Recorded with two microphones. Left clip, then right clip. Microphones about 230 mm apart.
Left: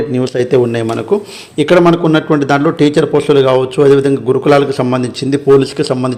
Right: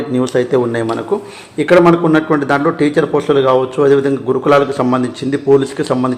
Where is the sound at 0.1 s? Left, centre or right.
Left.